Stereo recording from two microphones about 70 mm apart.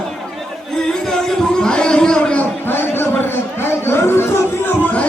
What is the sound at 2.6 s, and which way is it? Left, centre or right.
Chatter, left.